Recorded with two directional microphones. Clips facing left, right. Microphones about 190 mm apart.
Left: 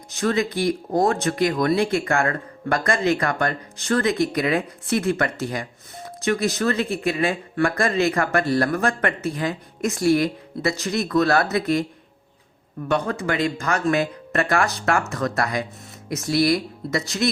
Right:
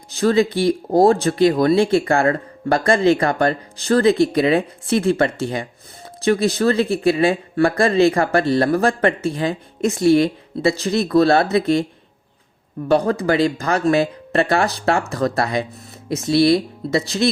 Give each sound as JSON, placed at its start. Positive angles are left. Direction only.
{"t": 0.1, "sound": "speech", "side_deg": -30}
{"t": 12.9, "sound": "speech", "side_deg": -35}